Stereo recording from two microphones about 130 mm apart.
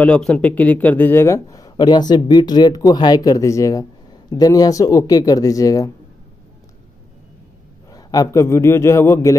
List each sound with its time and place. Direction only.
0.0 s speech: 10° left (ahead or behind); by 5.9 s 25° left (ahead or behind)
7.9 s speech: 25° left (ahead or behind)